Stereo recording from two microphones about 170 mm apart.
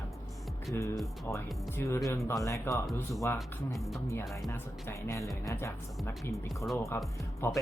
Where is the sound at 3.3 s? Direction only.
Centre (ahead or behind).